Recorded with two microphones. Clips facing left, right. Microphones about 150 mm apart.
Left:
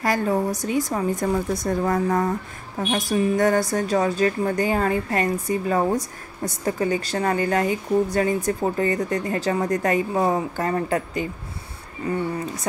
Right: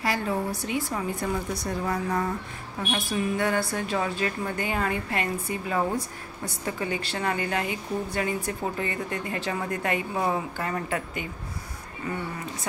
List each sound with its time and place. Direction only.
0.0 s a woman's voice: 45° left (ahead or behind)